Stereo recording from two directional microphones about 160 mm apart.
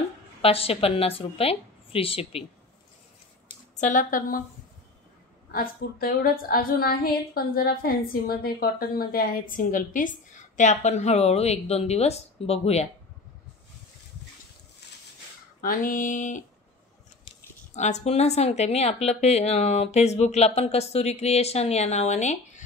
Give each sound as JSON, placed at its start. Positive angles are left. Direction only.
{"t": 0.4, "sound": "a woman's voice", "side_deg": 35}
{"t": 3.7, "sound": "a woman's voice", "side_deg": 50}
{"t": 5.5, "sound": "a woman's voice", "side_deg": 65}
{"t": 14.8, "sound": "a sound", "side_deg": 90}
{"t": 15.6, "sound": "a woman's voice", "side_deg": 60}
{"t": 17.7, "sound": "speech", "side_deg": 45}